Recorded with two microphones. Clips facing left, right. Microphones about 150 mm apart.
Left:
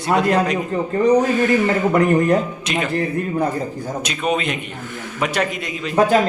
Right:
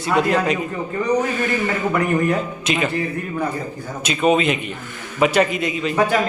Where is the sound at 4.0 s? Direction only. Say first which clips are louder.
Right 5 dB; centre (ahead or behind).